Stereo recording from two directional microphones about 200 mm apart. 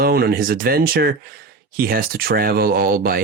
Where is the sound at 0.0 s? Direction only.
50° right (ahead or behind).